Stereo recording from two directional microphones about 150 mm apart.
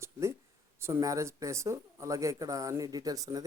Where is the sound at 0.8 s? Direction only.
20° right (ahead or behind).